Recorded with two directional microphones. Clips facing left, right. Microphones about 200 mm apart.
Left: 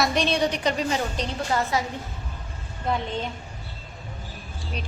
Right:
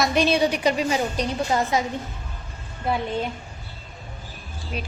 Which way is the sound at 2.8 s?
10° right (ahead or behind).